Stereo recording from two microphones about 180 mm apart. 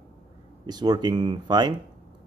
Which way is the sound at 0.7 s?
25° right (ahead or behind).